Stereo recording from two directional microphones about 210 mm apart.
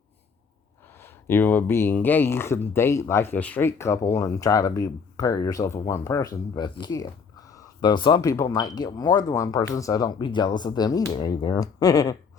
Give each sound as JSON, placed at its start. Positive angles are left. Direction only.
{"t": 0.9, "sound": "speech", "side_deg": 10}